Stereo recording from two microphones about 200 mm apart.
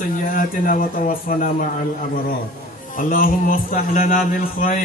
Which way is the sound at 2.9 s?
45° left (ahead or behind).